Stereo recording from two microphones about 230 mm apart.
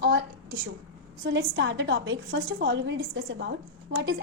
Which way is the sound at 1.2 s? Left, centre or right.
Right.